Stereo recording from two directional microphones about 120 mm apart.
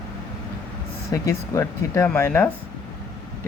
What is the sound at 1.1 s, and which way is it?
Speech, 25° left (ahead or behind).